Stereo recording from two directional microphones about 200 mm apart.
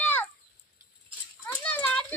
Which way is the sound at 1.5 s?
10° left (ahead or behind).